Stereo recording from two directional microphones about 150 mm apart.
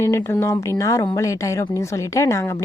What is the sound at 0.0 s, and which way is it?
A woman's voice, 15° left (ahead or behind).